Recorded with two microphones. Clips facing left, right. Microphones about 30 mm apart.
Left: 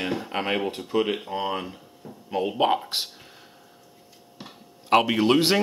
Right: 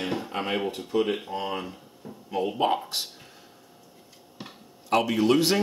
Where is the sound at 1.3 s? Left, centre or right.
Left.